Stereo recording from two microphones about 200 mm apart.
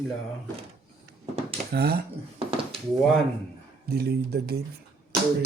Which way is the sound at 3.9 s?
55° right (ahead or behind).